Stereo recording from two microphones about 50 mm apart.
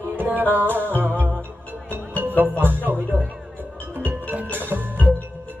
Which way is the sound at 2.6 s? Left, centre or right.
Right.